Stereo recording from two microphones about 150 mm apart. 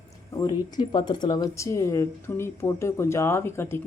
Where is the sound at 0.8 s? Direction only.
30° left (ahead or behind).